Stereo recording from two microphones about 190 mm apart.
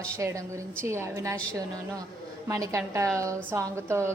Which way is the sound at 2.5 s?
15° right (ahead or behind).